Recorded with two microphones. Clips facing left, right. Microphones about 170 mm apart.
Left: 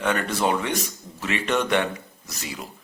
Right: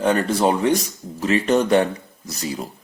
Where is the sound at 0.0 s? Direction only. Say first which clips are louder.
Right 5 dB; 35° right (ahead or behind).